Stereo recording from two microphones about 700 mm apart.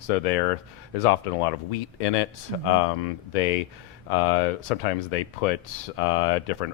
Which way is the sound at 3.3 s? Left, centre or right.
Left.